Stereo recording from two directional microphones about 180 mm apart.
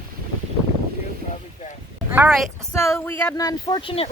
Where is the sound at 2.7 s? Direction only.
15° left (ahead or behind).